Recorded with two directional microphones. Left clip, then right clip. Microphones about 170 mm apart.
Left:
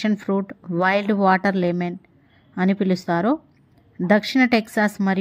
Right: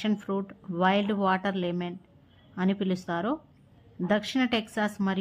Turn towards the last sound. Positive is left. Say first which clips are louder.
# left 9 dB
turn(degrees=30)  # may be behind; listen again after turning